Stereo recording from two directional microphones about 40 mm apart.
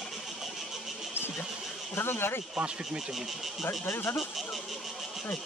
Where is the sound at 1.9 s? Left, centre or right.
Left.